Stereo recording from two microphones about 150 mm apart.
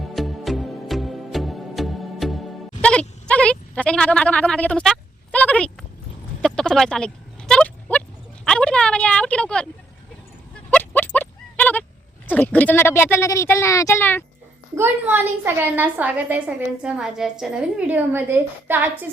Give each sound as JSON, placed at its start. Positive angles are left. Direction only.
{"t": 0.1, "sound": "music", "side_deg": 0}
{"t": 6.4, "sound": "a sound", "side_deg": 5}
{"t": 8.4, "sound": "a woman's voice", "side_deg": 5}
{"t": 10.7, "sound": "a sound", "side_deg": 10}
{"t": 12.3, "sound": "speech", "side_deg": 10}
{"t": 14.8, "sound": "a woman's voice", "side_deg": -15}